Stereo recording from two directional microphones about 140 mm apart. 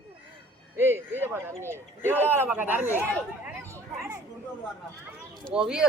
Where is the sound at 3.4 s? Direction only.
20° right (ahead or behind).